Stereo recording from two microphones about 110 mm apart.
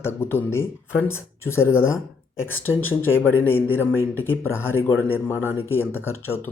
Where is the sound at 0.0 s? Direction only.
20° left (ahead or behind).